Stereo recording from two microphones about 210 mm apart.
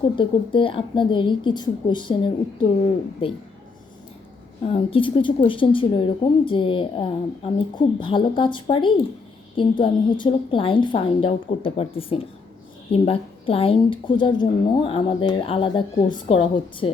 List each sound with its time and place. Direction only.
0.2 s a woman's voice: 25° left (ahead or behind)
4.6 s a woman's voice: 25° left (ahead or behind)